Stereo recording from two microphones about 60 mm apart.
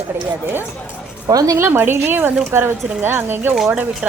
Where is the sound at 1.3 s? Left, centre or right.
Right.